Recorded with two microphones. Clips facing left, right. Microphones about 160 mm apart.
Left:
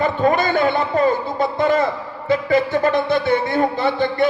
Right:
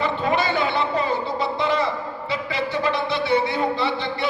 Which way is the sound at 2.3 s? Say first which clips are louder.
Left 9 dB; 45° left (ahead or behind).